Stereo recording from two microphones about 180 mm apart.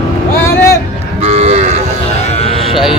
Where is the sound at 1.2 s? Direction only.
35° right (ahead or behind).